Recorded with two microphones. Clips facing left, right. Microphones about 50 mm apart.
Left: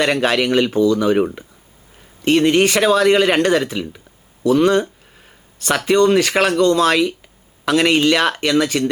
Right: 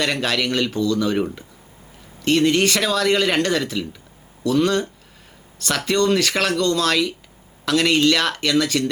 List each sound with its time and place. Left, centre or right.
0.0 s speech: left